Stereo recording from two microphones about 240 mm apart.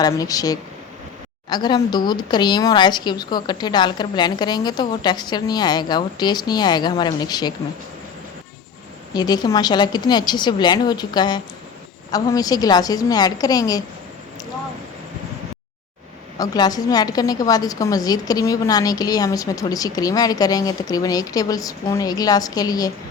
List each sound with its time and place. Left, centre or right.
0.0 s a woman's voice: centre
9.1 s a woman's voice: centre
16.4 s a woman's voice: centre